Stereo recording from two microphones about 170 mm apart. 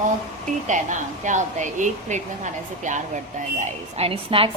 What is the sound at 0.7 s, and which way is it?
A woman's voice, 45° right (ahead or behind).